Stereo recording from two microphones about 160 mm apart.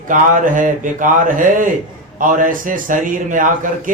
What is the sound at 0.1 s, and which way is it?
A man's voice, 55° right (ahead or behind).